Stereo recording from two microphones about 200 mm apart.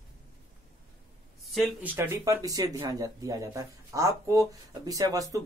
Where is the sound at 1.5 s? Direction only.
10° right (ahead or behind).